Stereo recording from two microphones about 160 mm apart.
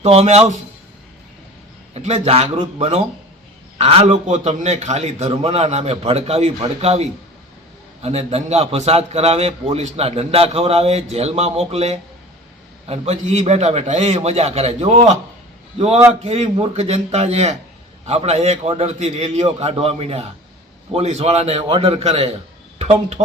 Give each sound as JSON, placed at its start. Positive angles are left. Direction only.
{"t": 0.0, "sound": "a man's voice", "side_deg": -40}
{"t": 1.9, "sound": "a man's voice", "side_deg": -45}
{"t": 8.0, "sound": "a man's voice", "side_deg": -40}
{"t": 16.2, "sound": "a man's voice", "side_deg": -40}